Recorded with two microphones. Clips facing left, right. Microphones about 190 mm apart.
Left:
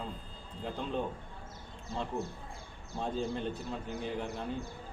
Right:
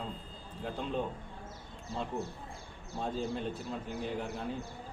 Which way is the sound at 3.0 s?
Centre (ahead or behind).